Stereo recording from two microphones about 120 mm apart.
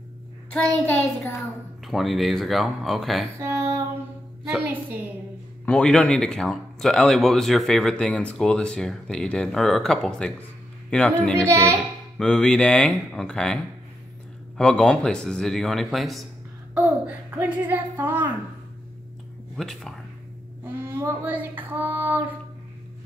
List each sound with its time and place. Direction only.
0.5 s speech: 15° left (ahead or behind)
1.9 s speech: centre (ahead or behind)
3.3 s female singing: 25° right (ahead or behind)
5.7 s speech: 5° left (ahead or behind)
14.6 s speech: 5° left (ahead or behind)
16.7 s a child's voice: 10° right (ahead or behind)
19.5 s speech: 5° left (ahead or behind)
20.6 s speech: 15° right (ahead or behind)